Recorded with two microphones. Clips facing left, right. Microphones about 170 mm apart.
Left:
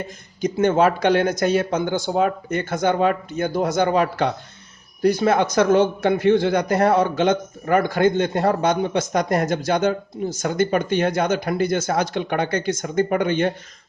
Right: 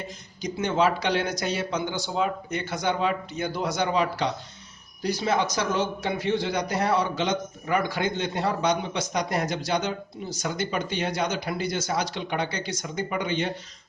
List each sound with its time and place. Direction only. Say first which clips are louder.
0.4 s a man's voice: left 7 dB; 50° left (ahead or behind)